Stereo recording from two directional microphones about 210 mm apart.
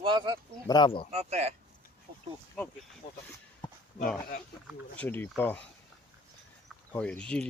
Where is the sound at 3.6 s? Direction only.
20° left (ahead or behind).